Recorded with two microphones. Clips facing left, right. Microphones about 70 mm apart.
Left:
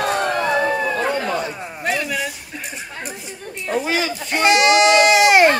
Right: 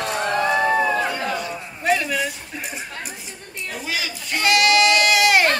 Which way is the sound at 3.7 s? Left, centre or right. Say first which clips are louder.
Left 8 dB; left.